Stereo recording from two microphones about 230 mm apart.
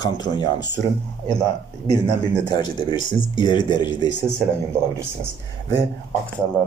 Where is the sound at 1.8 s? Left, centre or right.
Centre.